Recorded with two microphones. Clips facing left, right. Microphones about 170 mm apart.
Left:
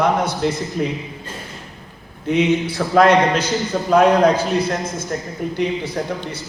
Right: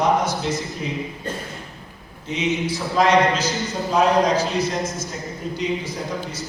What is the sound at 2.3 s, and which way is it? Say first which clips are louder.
A man's voice: left 6 dB; 60° left (ahead or behind).